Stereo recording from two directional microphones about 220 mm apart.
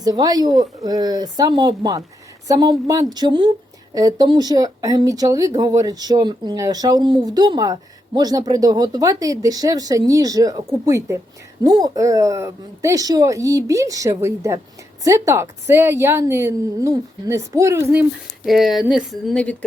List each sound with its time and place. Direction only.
0.0 s speech: 15° right (ahead or behind)
18.4 s speech: centre (ahead or behind)